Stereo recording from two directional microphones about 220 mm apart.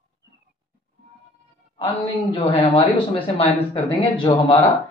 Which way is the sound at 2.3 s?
25° left (ahead or behind).